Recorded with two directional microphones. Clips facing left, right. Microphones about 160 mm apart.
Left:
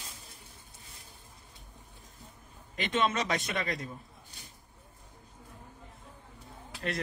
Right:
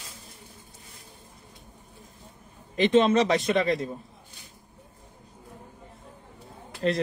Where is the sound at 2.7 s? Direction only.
30° right (ahead or behind).